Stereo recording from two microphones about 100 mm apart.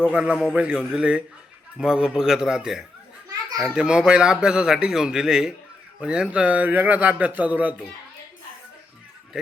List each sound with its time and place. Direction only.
0.1 s speech: 10° right (ahead or behind)